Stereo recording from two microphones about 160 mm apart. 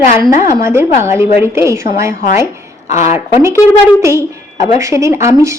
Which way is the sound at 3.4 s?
15° right (ahead or behind).